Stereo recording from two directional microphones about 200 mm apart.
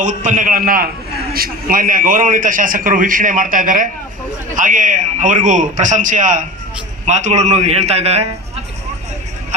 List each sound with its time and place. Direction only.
0.0 s a man's voice: 40° right (ahead or behind)